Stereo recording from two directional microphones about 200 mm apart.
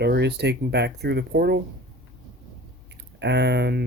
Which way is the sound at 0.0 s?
55° right (ahead or behind).